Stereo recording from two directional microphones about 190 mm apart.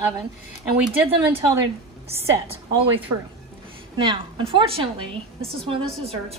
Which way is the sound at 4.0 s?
25° right (ahead or behind).